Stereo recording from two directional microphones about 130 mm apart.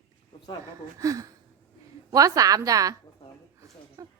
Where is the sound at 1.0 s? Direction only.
25° right (ahead or behind).